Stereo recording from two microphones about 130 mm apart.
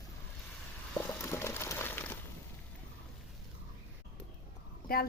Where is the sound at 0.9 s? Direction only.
20° left (ahead or behind).